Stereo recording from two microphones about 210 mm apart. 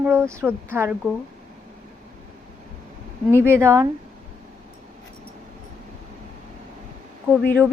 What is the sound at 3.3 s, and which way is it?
Speech, 10° right (ahead or behind).